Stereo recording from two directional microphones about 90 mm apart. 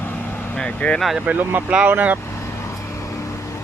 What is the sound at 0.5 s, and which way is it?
Speech, 10° left (ahead or behind).